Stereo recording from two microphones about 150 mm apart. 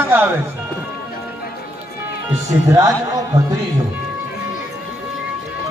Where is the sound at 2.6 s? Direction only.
20° right (ahead or behind).